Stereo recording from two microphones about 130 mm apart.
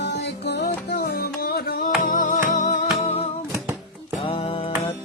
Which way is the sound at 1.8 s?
90° left.